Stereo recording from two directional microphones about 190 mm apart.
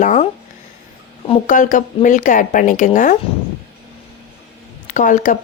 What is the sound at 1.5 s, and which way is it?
Speech, 40° left (ahead or behind).